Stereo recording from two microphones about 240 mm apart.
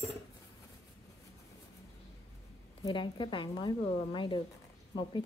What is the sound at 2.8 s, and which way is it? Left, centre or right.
Speech, centre.